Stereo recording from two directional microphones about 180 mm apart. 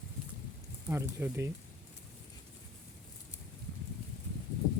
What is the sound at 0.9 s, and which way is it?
Speech, 15° right (ahead or behind).